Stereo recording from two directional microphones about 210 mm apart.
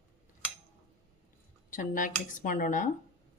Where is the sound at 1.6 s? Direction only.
40° left (ahead or behind).